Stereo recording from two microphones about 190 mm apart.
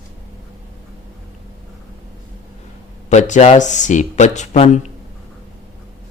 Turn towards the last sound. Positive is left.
turn(degrees=35)  # may be behind; listen again after turning